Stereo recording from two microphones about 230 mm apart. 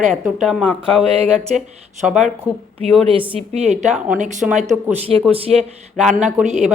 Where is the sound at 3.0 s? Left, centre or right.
Right.